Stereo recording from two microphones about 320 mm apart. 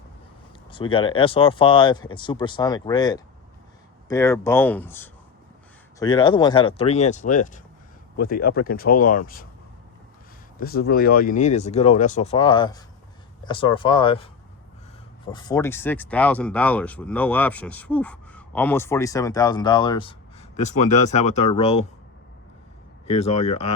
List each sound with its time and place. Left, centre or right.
0.7 s speech: centre
10.6 s speech: left
15.3 s speech: centre
23.0 s speech: centre